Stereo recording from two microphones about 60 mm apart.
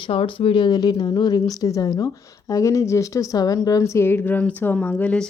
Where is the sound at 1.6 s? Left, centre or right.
Left.